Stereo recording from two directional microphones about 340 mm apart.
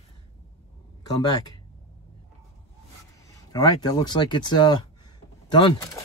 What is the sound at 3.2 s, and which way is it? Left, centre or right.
Speech, centre.